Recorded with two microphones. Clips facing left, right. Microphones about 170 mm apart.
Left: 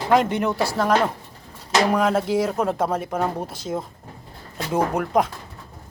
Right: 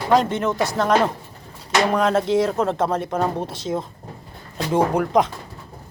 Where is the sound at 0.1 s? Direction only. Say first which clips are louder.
Right 1 dB; 15° left (ahead or behind).